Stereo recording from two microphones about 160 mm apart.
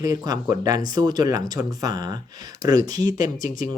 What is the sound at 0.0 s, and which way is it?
Speech, 25° right (ahead or behind).